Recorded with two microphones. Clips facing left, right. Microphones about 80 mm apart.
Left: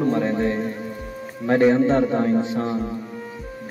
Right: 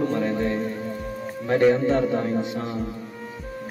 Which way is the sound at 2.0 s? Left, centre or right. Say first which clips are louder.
Left 3 dB; left.